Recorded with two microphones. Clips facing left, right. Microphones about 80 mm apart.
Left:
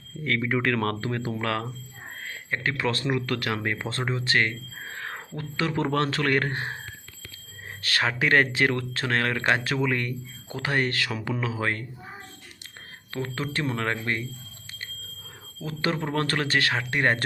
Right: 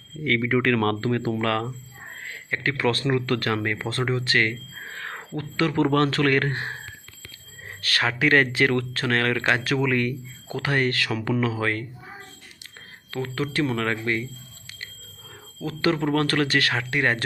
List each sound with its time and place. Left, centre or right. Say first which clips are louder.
0.3 s speech: right 4 dB; centre
2.5 s speech: right 3 dB; left
3.1 s speech: right 3 dB; centre
3.5 s speech: right 3 dB; centre
7.8 s speech: right 2 dB; left
11.3 s speech: right 8 dB; centre
11.5 s speech: right 2 dB; left
13.1 s speech: right 4 dB; left
15.6 s speech: right 5 dB; left
16.9 s speech: even; left